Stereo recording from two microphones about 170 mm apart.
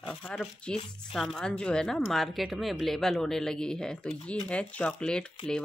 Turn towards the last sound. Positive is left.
turn(degrees=5)  # may be behind; listen again after turning